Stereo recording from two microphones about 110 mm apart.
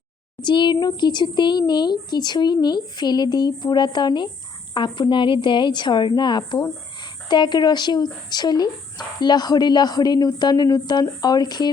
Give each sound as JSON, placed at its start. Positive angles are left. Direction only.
{"t": 0.4, "sound": "a child's voice", "side_deg": 45}